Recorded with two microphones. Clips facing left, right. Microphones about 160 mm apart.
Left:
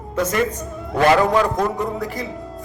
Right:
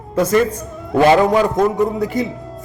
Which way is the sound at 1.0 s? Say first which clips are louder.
Right 3 dB; 20° right (ahead or behind).